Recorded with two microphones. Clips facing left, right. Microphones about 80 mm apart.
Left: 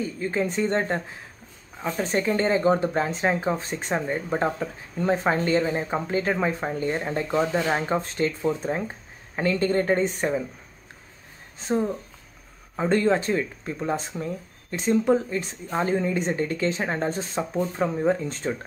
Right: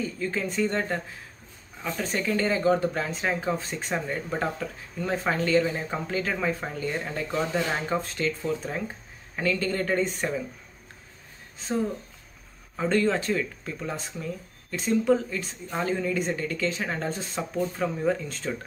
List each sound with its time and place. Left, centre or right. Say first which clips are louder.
0.2 s speech: left 3 dB; left
12.7 s speech: left 3 dB; left